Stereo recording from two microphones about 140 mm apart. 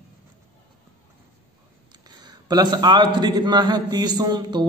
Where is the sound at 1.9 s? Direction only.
30° right (ahead or behind).